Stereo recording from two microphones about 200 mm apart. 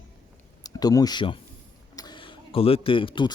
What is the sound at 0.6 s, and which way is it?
Speech, 20° left (ahead or behind).